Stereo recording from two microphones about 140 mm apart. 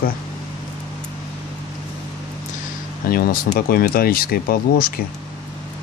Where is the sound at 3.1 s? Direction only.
90° left.